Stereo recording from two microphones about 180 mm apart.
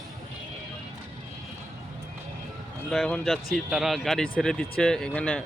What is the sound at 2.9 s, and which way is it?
Speech, centre (ahead or behind).